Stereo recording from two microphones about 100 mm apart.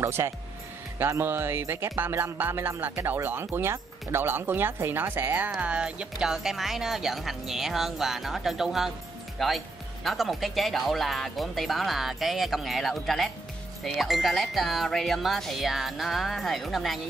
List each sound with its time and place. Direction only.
0.0 s speech: 25° right (ahead or behind); by 17.0 s centre (ahead or behind)